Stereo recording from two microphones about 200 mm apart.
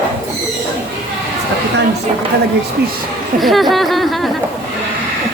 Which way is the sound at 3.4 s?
Centre (ahead or behind).